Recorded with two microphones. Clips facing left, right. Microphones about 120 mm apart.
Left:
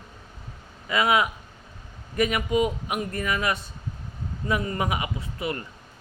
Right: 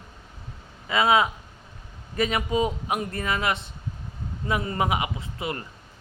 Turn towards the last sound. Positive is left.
turn(degrees=-25)  # may be behind; listen again after turning